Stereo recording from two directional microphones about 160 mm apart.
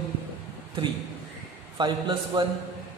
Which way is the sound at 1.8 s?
30° right (ahead or behind).